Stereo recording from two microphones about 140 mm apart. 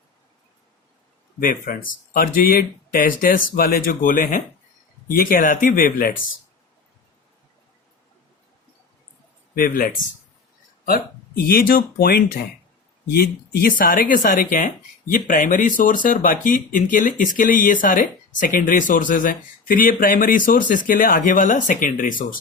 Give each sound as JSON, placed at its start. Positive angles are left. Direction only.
{"t": 1.4, "sound": "speech", "side_deg": 80}
{"t": 5.0, "sound": "speech", "side_deg": 90}
{"t": 9.6, "sound": "speech", "side_deg": 85}
{"t": 11.4, "sound": "speech", "side_deg": 90}
{"t": 13.6, "sound": "speech", "side_deg": 85}